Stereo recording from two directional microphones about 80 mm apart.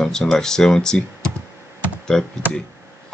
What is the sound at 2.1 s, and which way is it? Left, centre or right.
Speech, centre.